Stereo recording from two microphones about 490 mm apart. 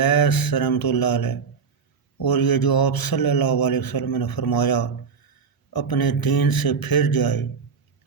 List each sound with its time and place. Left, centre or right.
0.0 s speech: left